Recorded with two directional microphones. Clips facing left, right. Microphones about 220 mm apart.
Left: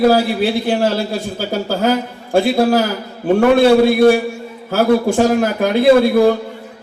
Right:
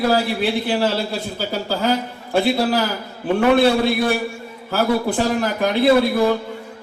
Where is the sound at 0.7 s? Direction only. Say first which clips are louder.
Left 4 dB; 45° left (ahead or behind).